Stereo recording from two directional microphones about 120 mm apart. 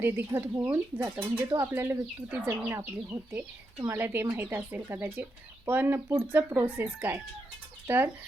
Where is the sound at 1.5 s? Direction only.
30° right (ahead or behind).